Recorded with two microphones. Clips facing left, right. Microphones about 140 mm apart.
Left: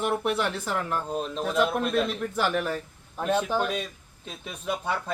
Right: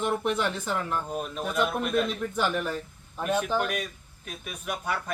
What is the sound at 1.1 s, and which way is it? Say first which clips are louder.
Speech: left 2 dB; 25° left (ahead or behind).